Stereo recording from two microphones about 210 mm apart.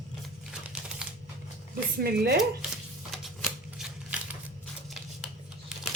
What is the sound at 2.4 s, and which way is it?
Shuffling cards, centre (ahead or behind).